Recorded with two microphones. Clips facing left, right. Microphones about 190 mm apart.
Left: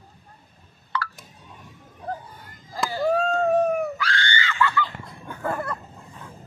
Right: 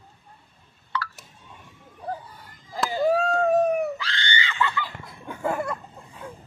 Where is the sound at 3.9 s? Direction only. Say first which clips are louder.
Left 3 dB; 20° right (ahead or behind).